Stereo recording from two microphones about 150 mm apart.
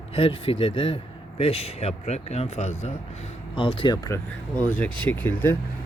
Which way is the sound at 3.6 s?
35° left (ahead or behind).